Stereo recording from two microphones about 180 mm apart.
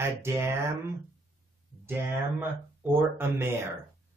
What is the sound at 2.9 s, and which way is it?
Speech, 15° right (ahead or behind).